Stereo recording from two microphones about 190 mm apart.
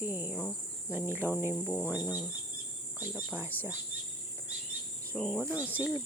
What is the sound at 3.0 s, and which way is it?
Speech, 10° right (ahead or behind).